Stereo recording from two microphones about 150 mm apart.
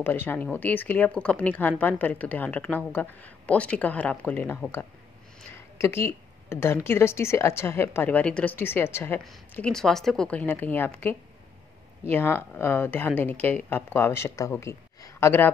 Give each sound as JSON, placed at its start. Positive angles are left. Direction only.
{"t": 0.0, "sound": "a woman's voice", "side_deg": 15}